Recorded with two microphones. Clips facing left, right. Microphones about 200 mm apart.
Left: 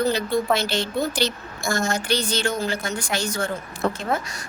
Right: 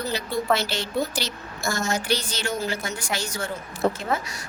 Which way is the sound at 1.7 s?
55° left (ahead or behind).